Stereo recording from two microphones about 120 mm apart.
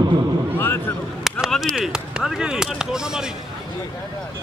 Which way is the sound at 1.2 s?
Centre (ahead or behind).